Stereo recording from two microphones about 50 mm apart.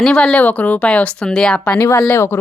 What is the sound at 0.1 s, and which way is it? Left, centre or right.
Speech, left.